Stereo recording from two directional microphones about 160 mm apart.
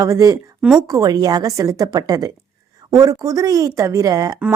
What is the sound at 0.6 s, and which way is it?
Speech, centre (ahead or behind).